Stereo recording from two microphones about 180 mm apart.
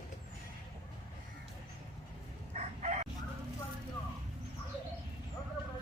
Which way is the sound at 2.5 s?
40° right (ahead or behind).